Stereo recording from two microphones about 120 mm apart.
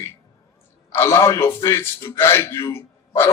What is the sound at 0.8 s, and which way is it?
A man's voice, 25° left (ahead or behind).